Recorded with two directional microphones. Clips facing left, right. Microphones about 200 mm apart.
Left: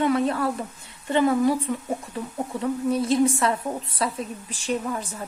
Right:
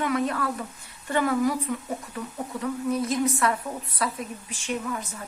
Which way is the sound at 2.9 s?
30° left (ahead or behind).